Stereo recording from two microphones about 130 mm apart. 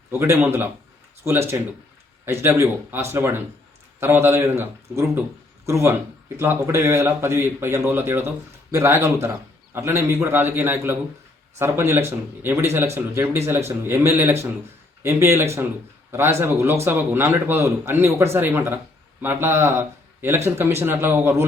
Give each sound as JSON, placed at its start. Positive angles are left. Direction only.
{"t": 0.1, "sound": "speech", "side_deg": -15}